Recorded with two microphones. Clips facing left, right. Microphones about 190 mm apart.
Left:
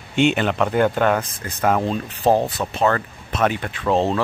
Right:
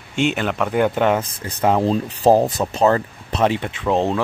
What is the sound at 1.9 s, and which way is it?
Speech, 35° right (ahead or behind).